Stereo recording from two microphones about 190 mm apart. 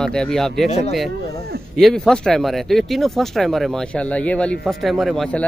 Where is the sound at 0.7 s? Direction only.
35° left (ahead or behind).